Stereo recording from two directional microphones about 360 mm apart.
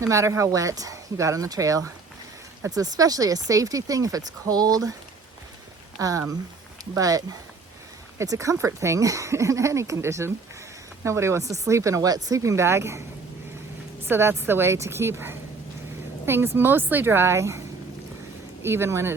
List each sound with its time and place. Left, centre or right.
0.0 s speech: centre
6.0 s speech: centre
14.0 s speech: centre
18.6 s speech: centre